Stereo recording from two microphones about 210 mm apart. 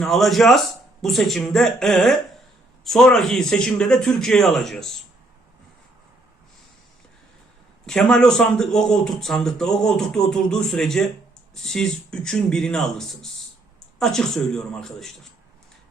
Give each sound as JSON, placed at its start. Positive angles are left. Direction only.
{"t": 0.0, "sound": "a man's voice", "side_deg": 0}
{"t": 7.9, "sound": "a man's voice", "side_deg": 5}